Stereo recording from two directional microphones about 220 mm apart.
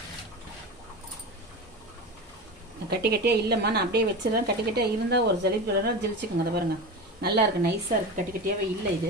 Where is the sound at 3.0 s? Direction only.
45° right (ahead or behind).